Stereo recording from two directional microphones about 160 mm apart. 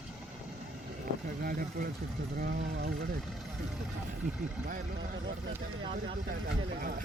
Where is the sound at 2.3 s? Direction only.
80° right.